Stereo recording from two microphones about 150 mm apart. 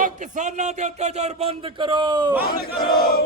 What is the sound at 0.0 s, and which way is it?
Speech, 55° right (ahead or behind).